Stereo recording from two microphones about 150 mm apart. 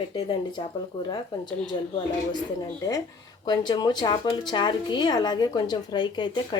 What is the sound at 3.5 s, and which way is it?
A woman's voice, 30° left (ahead or behind).